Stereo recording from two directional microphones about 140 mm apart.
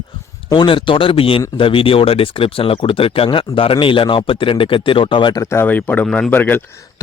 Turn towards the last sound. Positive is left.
turn(degrees=15)  # may be behind; listen again after turning